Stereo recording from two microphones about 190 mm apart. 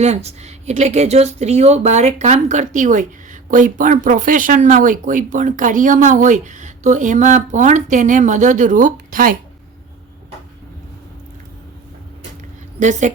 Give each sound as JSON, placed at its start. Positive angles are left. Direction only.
{"t": 0.0, "sound": "speech", "side_deg": -35}
{"t": 12.8, "sound": "speech", "side_deg": -40}